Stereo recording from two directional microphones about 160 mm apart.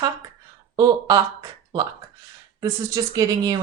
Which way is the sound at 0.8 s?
25° right (ahead or behind).